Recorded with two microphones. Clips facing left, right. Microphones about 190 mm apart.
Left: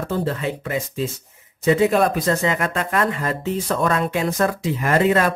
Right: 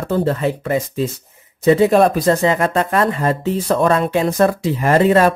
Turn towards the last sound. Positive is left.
turn(degrees=-30)  # may be behind; listen again after turning